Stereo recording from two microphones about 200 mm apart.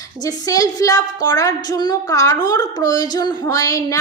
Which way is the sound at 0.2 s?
20° left (ahead or behind).